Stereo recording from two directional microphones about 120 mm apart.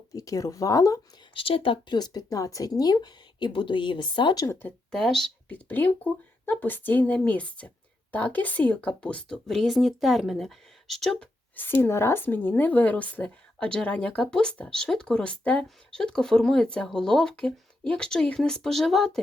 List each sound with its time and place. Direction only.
0.2 s speech: 30° left (ahead or behind)
1.3 s speech: 50° left (ahead or behind)
4.9 s speech: 5° left (ahead or behind)
5.6 s speech: 15° left (ahead or behind)
11.5 s speech: 15° left (ahead or behind); by 19.2 s centre (ahead or behind)